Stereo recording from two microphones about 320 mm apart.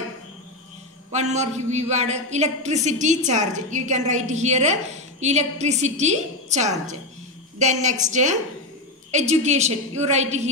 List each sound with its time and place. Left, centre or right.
1.1 s a woman's voice: right